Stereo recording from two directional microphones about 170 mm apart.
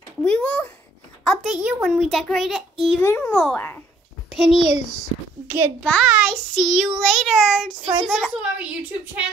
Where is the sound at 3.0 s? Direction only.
15° left (ahead or behind).